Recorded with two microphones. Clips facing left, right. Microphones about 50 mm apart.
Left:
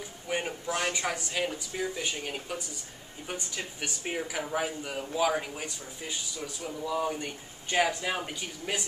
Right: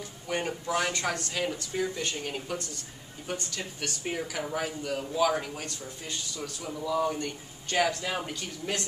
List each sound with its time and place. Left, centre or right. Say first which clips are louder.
0.3 s speech: right 2 dB; centre